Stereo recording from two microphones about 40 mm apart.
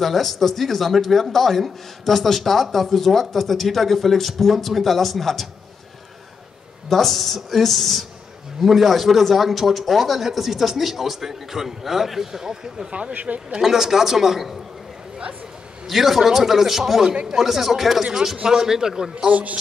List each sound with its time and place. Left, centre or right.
0.0 s a man's voice: centre
6.9 s a man's voice: centre
13.1 s a man's voice: right
13.6 s a man's voice: centre
15.9 s a man's voice: centre
17.1 s speech: right
17.4 s a man's voice: centre
19.2 s a man's voice: right